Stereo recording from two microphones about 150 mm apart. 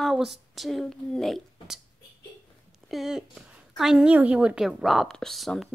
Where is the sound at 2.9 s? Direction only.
5° right (ahead or behind).